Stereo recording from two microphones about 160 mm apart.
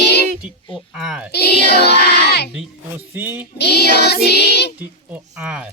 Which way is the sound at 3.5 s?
90° left.